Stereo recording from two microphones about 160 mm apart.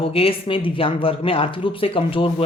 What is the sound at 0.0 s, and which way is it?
Speech, 35° left (ahead or behind).